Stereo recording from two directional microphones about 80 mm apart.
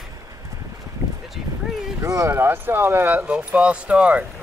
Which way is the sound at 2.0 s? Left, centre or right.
Right.